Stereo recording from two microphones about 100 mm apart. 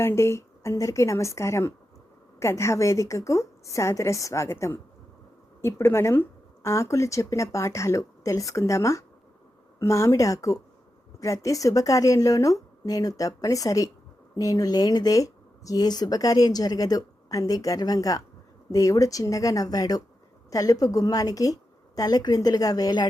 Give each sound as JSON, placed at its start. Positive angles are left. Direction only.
{"t": 0.0, "sound": "a woman's voice", "side_deg": 25}